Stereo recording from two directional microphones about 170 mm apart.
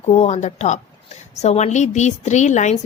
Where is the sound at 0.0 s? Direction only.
40° left (ahead or behind).